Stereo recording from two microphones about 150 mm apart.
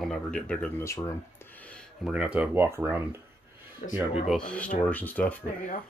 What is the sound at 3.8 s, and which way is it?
Speech, 60° left (ahead or behind).